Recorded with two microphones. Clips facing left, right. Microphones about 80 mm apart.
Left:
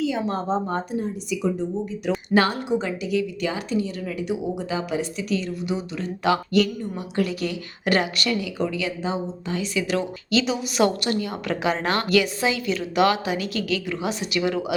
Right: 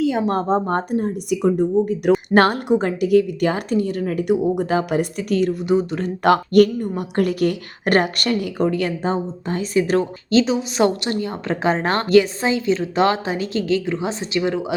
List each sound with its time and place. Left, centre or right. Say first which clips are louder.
0.3 s a woman's voice: right 5 dB; right